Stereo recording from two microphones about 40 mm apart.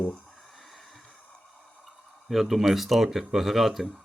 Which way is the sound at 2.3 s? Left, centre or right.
Centre.